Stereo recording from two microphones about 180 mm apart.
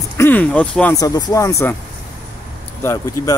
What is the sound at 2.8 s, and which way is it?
Speech, 15° left (ahead or behind).